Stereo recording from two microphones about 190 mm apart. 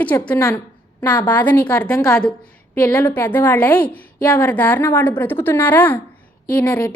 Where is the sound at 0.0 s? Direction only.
5° left (ahead or behind).